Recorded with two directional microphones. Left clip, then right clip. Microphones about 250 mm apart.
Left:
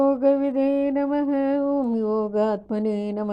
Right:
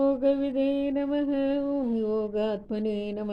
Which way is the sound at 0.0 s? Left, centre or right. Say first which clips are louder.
Left 5 dB; left.